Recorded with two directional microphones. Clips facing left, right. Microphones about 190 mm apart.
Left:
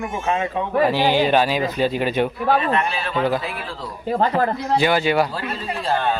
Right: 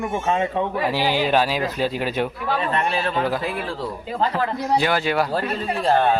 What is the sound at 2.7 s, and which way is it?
Speech, 40° right (ahead or behind).